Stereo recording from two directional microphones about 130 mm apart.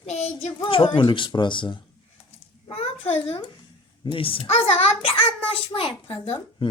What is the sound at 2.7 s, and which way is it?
A child's voice, 50° left (ahead or behind).